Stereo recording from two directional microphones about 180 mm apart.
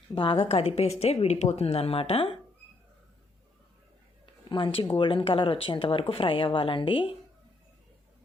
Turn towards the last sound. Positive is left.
turn(degrees=30)  # may be behind; listen again after turning